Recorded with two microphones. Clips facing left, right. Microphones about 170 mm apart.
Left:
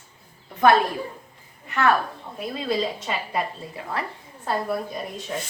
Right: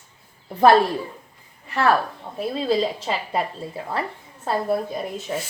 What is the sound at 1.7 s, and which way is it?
A woman's voice, 30° right (ahead or behind).